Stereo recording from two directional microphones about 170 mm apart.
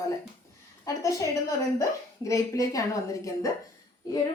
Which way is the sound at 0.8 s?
20° left (ahead or behind).